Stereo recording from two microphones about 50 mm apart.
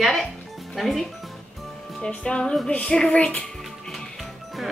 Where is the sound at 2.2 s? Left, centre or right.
Centre.